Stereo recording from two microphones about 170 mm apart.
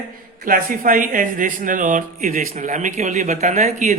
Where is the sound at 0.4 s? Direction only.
55° right (ahead or behind).